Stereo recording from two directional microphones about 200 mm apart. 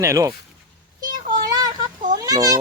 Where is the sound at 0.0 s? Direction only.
15° right (ahead or behind).